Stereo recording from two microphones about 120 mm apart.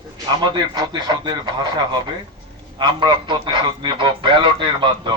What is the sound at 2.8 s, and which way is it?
Speech, 40° right (ahead or behind).